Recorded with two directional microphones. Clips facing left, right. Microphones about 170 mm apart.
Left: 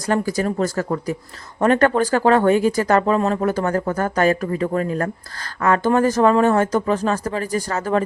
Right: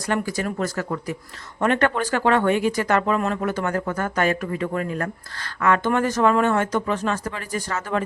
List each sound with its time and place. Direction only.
0.1 s speech: 40° left (ahead or behind)